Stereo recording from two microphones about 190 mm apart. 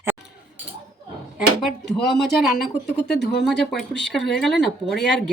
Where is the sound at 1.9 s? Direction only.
Centre (ahead or behind).